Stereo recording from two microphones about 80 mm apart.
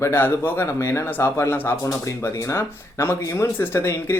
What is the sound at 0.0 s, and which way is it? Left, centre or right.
Speech, left.